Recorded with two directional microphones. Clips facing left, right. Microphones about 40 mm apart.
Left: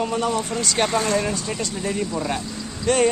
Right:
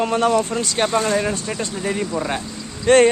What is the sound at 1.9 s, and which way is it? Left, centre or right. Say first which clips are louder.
Speech: right 2 dB; centre.